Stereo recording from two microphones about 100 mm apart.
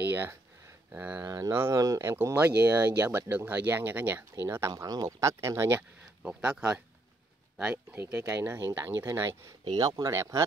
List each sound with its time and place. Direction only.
0.1 s a sound: 20° right (ahead or behind)
0.9 s speech: 20° right (ahead or behind)
2.3 s speech: 15° right (ahead or behind)
7.7 s speech: 20° right (ahead or behind)
9.7 s speech: 40° right (ahead or behind)